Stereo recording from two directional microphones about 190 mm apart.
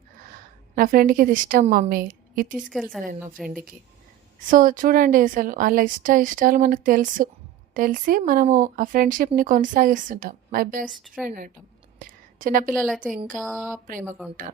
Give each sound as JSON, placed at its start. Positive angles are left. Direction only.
{"t": 0.8, "sound": "speech", "side_deg": -50}
{"t": 3.3, "sound": "a woman's voice", "side_deg": 0}
{"t": 4.4, "sound": "speech", "side_deg": -45}
{"t": 10.8, "sound": "a woman's voice", "side_deg": 0}
{"t": 11.3, "sound": "speech", "side_deg": -45}
{"t": 11.9, "sound": "a sound", "side_deg": -45}
{"t": 12.7, "sound": "a woman's voice", "side_deg": 5}